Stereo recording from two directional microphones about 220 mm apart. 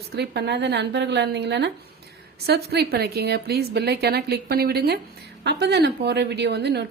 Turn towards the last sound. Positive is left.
turn(degrees=-50)  # may be behind; listen again after turning